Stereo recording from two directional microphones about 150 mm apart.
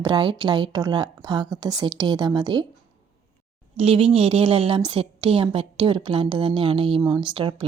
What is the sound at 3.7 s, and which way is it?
A woman's voice, 40° right (ahead or behind).